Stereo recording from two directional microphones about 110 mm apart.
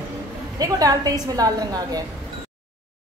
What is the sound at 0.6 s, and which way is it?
A woman's voice, 35° right (ahead or behind).